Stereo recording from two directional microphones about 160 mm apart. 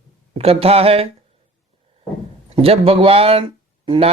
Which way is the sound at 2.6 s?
35° right (ahead or behind).